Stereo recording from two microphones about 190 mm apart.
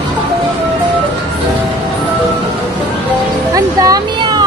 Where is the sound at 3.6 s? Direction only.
20° right (ahead or behind).